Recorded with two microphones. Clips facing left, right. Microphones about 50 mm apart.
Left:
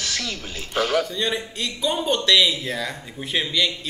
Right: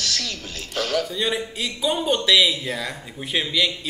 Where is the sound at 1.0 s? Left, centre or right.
Centre.